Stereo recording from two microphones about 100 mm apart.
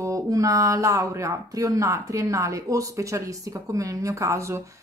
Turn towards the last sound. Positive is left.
turn(degrees=-30)  # may be behind; listen again after turning